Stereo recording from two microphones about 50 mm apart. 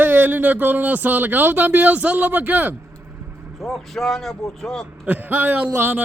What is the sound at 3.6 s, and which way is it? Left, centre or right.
Speech, centre.